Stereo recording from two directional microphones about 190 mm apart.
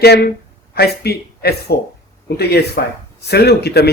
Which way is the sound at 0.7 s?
55° left (ahead or behind).